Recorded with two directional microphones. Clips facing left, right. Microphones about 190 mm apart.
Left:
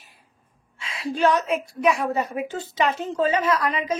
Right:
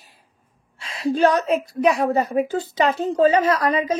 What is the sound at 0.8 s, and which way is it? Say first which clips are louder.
A woman's voice: right 4 dB; 40° right (ahead or behind).